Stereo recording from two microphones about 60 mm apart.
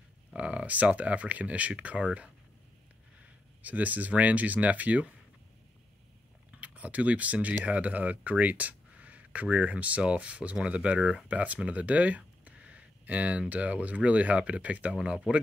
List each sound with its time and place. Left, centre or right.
0.4 s speech: right
3.6 s speech: right
6.5 s speech: right